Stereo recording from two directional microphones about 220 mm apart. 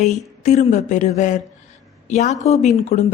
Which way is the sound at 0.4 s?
30° left (ahead or behind).